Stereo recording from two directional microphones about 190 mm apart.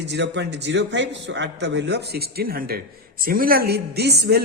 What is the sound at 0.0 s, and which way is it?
Speech, 65° right (ahead or behind).